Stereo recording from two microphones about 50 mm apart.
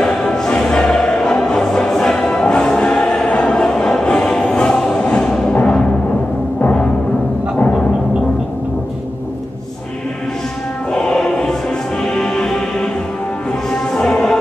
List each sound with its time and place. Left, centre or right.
0.0 s music: centre
5.5 s timpani: left
10.9 s music: centre